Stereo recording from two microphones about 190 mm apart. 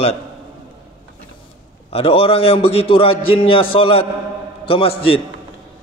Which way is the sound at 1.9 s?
30° left (ahead or behind).